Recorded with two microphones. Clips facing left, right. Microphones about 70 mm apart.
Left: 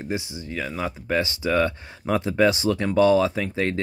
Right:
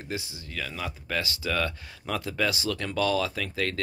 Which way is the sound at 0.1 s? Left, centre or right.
Left.